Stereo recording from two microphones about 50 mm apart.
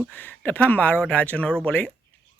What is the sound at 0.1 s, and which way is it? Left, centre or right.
A man's voice, left.